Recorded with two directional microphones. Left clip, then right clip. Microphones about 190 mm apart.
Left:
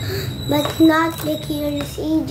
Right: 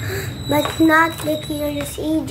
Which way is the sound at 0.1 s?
Centre (ahead or behind).